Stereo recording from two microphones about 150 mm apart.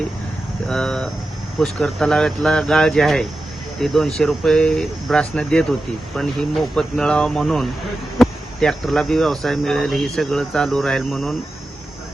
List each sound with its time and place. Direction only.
0.7 s speech: 5° left (ahead or behind)